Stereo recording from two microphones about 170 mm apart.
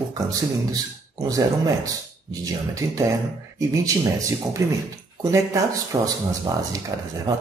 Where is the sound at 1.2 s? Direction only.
20° right (ahead or behind).